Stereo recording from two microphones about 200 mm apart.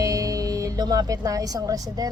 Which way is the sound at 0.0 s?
15° right (ahead or behind).